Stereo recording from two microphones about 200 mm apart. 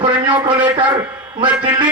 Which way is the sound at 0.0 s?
25° right (ahead or behind).